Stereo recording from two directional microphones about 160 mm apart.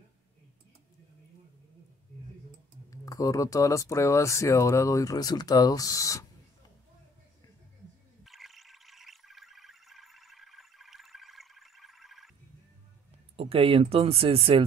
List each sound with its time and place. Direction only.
2.9 s speech: 20° left (ahead or behind)
8.2 s a sound: centre (ahead or behind)
13.4 s speech: 35° right (ahead or behind)